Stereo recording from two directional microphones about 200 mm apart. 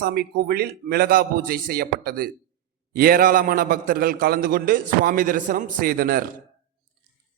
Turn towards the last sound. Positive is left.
turn(degrees=-45)  # may be behind; listen again after turning